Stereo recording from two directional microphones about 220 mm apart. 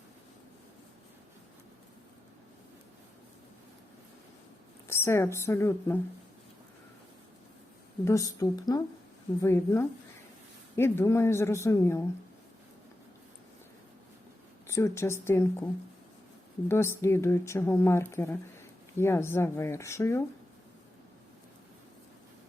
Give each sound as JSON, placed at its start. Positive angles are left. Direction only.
{"t": 4.9, "sound": "speech", "side_deg": 10}
{"t": 8.0, "sound": "speech", "side_deg": 15}
{"t": 14.7, "sound": "speech", "side_deg": 15}